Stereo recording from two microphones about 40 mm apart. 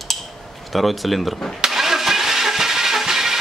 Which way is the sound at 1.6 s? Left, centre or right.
Centre.